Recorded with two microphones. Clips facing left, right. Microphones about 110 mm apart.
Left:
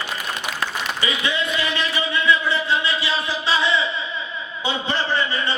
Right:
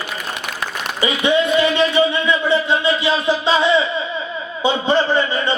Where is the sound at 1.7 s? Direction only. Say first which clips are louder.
Right 8 dB; 25° right (ahead or behind).